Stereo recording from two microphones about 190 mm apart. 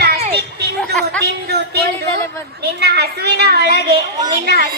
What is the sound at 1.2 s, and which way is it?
Speech, 60° right (ahead or behind).